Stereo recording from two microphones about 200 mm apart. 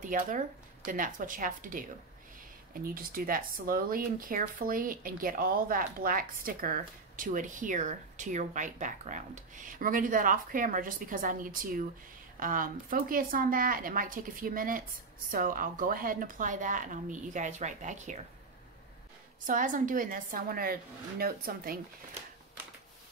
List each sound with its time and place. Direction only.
0.0 s speech: 40° right (ahead or behind)
19.4 s speech: 40° right (ahead or behind)